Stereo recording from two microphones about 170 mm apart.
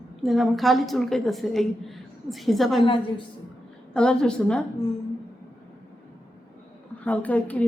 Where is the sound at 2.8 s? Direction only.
30° left (ahead or behind).